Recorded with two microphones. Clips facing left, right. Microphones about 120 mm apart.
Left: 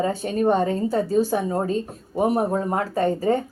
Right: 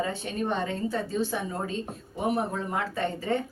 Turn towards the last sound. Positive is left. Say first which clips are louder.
# left 8 dB
turn(degrees=40)  # may be behind; listen again after turning